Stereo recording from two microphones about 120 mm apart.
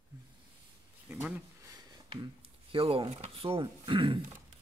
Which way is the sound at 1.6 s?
35° right (ahead or behind).